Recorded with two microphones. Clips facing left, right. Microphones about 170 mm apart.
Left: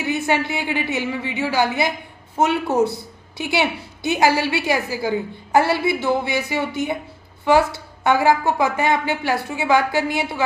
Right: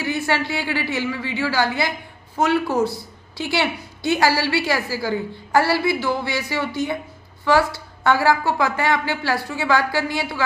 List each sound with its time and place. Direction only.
0.0 s a woman's voice: 20° left (ahead or behind)